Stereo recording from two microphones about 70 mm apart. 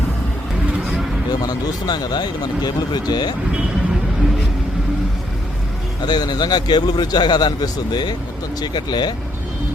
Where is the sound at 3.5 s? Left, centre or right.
Centre.